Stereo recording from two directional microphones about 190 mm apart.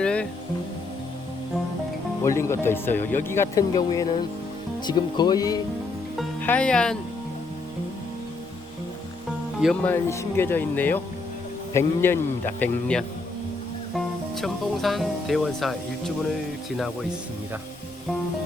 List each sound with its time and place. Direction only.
0.0 s music: 5° left (ahead or behind)
2.2 s speech: 15° left (ahead or behind)
6.1 s speech: 5° left (ahead or behind)
9.8 s speech: 15° left (ahead or behind)